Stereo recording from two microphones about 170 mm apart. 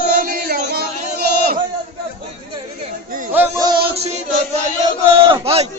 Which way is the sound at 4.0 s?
40° right (ahead or behind).